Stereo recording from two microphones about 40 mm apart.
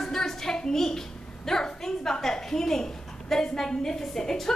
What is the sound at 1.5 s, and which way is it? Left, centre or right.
A woman's voice, centre.